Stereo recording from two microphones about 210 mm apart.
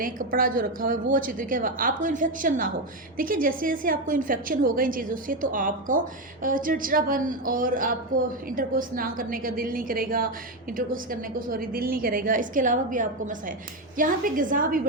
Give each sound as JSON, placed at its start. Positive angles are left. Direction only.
{"t": 0.0, "sound": "a woman's voice", "side_deg": -40}